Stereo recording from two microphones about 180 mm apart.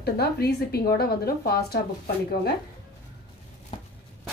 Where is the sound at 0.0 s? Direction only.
65° left (ahead or behind).